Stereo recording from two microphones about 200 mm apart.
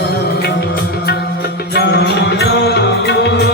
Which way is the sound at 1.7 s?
55° left (ahead or behind).